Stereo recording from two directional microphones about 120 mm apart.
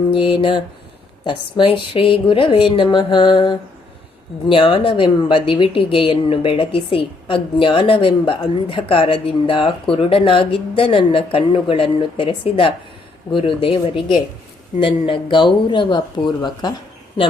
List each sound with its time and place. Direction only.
0.1 s a woman's voice: 45° left (ahead or behind)